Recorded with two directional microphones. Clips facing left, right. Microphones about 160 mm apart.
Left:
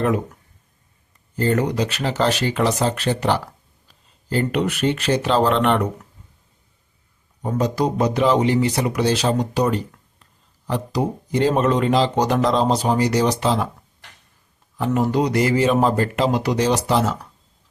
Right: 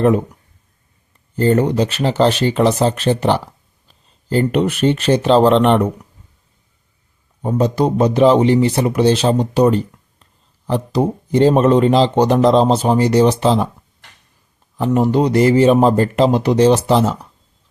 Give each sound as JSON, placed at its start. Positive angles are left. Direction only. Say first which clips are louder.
{"t": 1.4, "sound": "speech", "louder": "right 5 dB", "side_deg": -30}
{"t": 7.4, "sound": "speech", "louder": "right 5 dB", "side_deg": -25}
{"t": 14.8, "sound": "speech", "louder": "right 5 dB", "side_deg": -25}